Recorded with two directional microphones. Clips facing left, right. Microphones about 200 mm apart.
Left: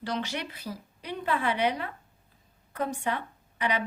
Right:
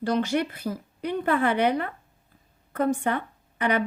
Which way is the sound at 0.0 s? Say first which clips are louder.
Right 9 dB; 50° right (ahead or behind).